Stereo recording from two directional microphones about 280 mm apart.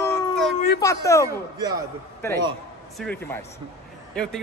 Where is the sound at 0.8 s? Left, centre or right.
Centre.